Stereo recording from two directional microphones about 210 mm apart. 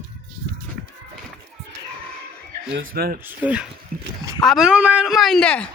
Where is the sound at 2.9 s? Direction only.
45° right (ahead or behind).